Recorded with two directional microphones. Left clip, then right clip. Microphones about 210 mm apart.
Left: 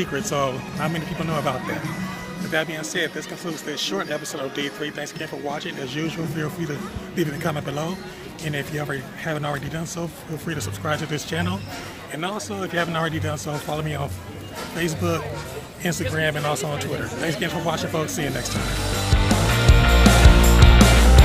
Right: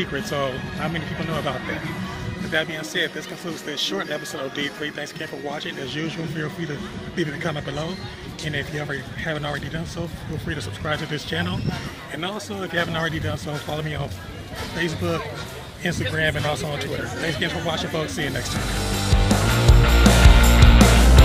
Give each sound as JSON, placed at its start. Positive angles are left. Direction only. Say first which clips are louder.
{"t": 0.0, "sound": "speech", "louder": "left 1 dB", "side_deg": 5}
{"t": 19.2, "sound": "music", "louder": "left 1 dB", "side_deg": 0}